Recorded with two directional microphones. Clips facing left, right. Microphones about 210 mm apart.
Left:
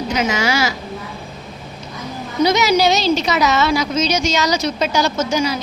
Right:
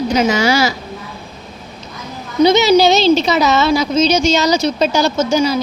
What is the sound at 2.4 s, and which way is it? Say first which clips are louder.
A woman's voice: right 5 dB; 25° right (ahead or behind).